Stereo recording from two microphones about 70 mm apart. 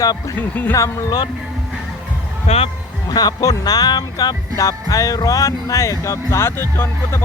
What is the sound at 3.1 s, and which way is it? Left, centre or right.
Music, left.